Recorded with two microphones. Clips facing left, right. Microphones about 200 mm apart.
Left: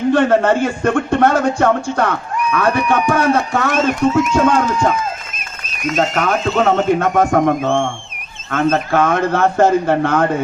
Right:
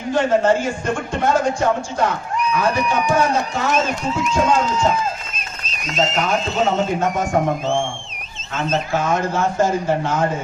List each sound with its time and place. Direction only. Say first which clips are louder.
0.1 s speech: left 2 dB; 65° left (ahead or behind)